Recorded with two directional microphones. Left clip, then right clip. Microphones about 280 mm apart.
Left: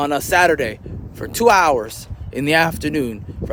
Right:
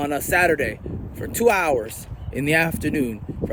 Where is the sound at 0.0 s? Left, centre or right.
Centre.